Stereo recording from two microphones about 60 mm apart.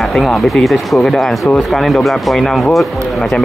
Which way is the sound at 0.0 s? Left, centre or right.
Centre.